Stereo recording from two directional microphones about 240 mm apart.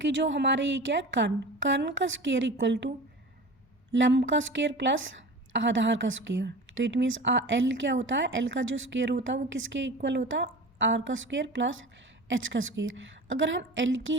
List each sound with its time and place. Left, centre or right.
0.0 s a woman's voice: right
3.9 s a woman's voice: right